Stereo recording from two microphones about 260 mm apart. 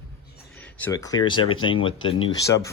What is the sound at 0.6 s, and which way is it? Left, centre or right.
Speech, centre.